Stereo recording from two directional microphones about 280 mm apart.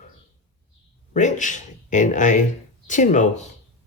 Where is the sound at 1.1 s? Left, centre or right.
Left.